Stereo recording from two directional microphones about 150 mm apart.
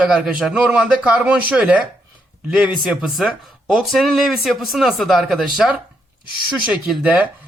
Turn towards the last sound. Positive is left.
turn(degrees=-10)  # may be behind; listen again after turning